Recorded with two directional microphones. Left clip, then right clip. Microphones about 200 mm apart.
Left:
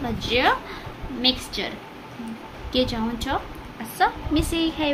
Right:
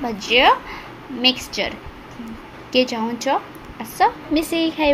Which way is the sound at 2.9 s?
15° right (ahead or behind).